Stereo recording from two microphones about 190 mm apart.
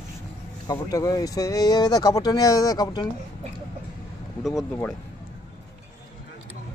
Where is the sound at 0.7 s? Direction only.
20° left (ahead or behind).